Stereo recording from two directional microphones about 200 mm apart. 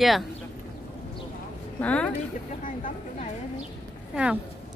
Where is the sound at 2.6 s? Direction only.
40° left (ahead or behind).